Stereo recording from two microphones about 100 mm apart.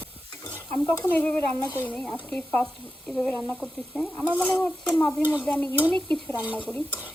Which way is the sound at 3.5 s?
10° right (ahead or behind).